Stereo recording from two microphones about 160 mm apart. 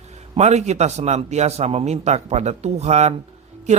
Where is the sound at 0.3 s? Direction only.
45° right (ahead or behind).